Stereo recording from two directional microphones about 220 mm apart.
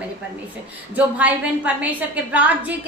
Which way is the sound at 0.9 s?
5° right (ahead or behind).